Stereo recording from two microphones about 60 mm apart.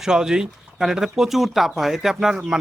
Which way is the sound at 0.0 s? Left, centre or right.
Centre.